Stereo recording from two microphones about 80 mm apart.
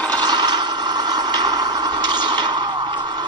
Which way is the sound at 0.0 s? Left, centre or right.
Right.